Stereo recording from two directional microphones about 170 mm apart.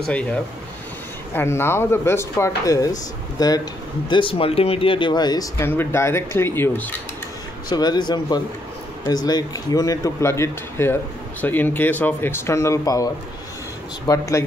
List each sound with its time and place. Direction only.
0.0 s speech: 5° left (ahead or behind)
7.7 s speech: 25° left (ahead or behind)